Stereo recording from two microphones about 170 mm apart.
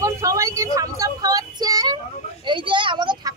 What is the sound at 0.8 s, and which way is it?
Speech, 20° right (ahead or behind).